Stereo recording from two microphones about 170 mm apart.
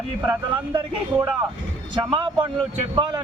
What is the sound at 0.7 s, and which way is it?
A man's voice, 25° right (ahead or behind).